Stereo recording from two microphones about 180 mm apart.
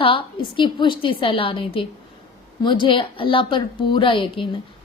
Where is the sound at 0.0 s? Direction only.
30° left (ahead or behind).